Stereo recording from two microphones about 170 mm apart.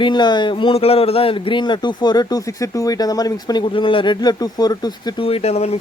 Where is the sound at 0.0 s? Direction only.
25° left (ahead or behind).